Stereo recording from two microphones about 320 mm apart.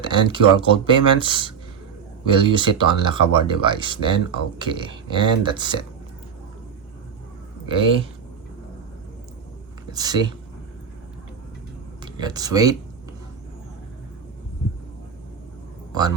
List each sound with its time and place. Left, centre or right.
0.0 s speech: centre
7.7 s speech: centre
9.9 s speech: centre
12.0 s speech: centre
15.9 s a man's voice: centre